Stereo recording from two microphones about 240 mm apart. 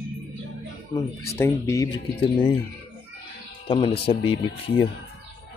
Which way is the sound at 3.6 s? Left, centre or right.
Left.